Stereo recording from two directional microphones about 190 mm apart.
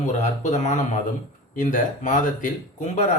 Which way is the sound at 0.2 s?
40° left (ahead or behind).